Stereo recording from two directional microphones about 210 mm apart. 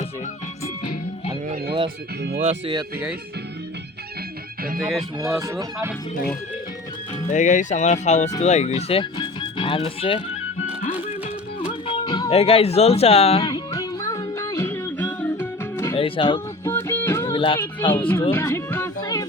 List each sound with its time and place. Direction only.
2.4 s speech: 30° right (ahead or behind)
4.8 s speech: centre (ahead or behind)
5.4 s speech: 15° right (ahead or behind)
7.3 s speech: 35° left (ahead or behind)
11.6 s music: 25° left (ahead or behind)
13.4 s music: 15° left (ahead or behind)
16.0 s speech: 25° left (ahead or behind)
16.6 s music: 10° left (ahead or behind)
17.3 s speech: 25° left (ahead or behind)
17.9 s speech: 10° left (ahead or behind)